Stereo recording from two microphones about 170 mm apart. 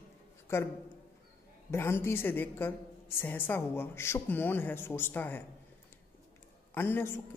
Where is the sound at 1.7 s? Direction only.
15° left (ahead or behind).